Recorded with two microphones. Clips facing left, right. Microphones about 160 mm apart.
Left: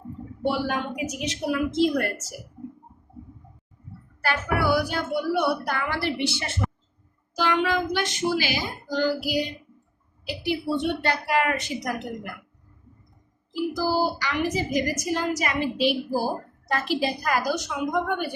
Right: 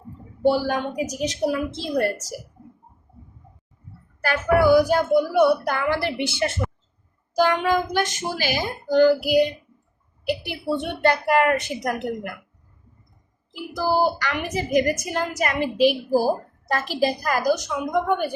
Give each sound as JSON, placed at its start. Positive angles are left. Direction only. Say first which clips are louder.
{"t": 0.4, "sound": "a woman's voice", "louder": "right 5 dB", "side_deg": -35}
{"t": 4.2, "sound": "speech", "louder": "right 7 dB", "side_deg": -45}
{"t": 13.5, "sound": "a woman's voice", "louder": "right 1 dB", "side_deg": -55}